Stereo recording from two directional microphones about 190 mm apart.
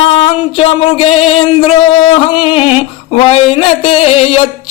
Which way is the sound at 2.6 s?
5° right (ahead or behind).